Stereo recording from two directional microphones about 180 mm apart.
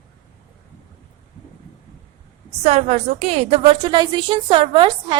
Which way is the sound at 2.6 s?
40° right (ahead or behind).